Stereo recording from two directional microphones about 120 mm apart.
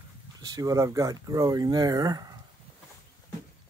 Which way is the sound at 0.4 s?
30° right (ahead or behind).